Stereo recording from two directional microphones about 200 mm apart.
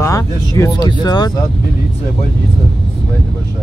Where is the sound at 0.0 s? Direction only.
15° left (ahead or behind).